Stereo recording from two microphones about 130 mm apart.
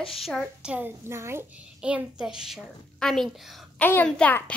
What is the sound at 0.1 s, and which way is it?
A child's voice, centre (ahead or behind).